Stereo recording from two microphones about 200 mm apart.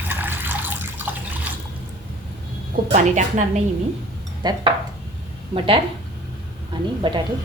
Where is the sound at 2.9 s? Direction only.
40° right (ahead or behind).